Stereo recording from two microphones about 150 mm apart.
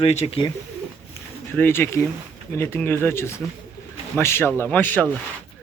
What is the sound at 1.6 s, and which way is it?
Speech, 15° left (ahead or behind).